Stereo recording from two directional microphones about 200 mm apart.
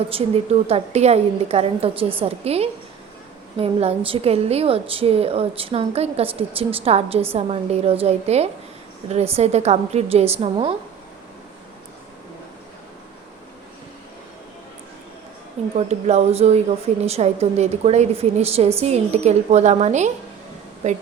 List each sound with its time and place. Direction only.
0.1 s a woman's voice: 30° right (ahead or behind)
15.7 s a woman's voice: 35° right (ahead or behind)